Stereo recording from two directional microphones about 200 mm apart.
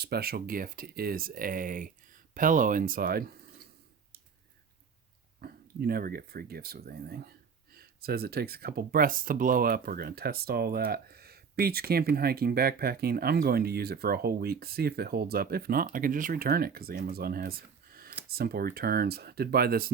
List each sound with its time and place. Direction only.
0.0 s speech: 50° right (ahead or behind)
5.4 s speech: 50° right (ahead or behind)